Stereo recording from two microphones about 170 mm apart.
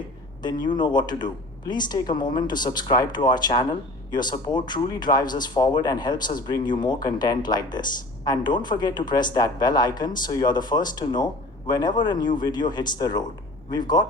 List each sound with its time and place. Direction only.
0.6 s speech: 25° left (ahead or behind)